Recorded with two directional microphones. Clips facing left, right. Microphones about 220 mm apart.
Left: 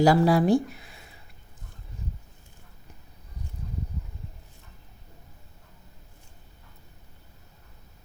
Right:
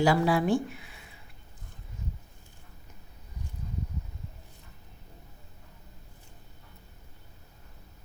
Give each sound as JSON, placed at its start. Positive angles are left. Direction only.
{"t": 0.0, "sound": "speech", "side_deg": 40}